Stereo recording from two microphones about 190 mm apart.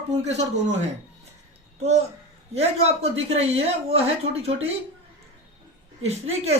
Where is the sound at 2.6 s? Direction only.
30° right (ahead or behind).